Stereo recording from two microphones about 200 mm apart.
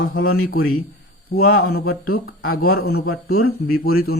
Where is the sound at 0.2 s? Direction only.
45° left (ahead or behind).